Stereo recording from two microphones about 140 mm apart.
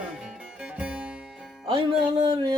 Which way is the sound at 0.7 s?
10° right (ahead or behind).